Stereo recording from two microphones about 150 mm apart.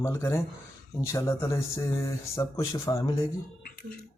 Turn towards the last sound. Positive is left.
turn(degrees=25)  # may be behind; listen again after turning